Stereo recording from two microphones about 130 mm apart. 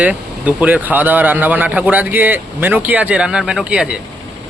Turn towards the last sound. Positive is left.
turn(degrees=-10)  # may be behind; listen again after turning